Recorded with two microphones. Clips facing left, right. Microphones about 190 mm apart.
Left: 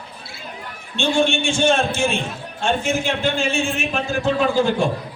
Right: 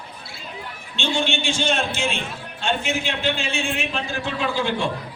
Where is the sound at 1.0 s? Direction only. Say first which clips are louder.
Left 5 dB; 50° left (ahead or behind).